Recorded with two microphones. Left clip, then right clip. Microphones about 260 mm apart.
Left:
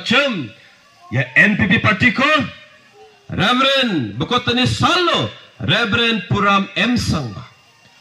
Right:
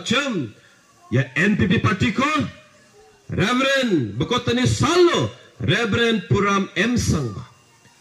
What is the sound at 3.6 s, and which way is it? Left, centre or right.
A man's voice, centre.